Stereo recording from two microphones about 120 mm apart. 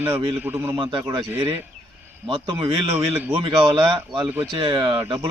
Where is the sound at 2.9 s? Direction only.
15° right (ahead or behind).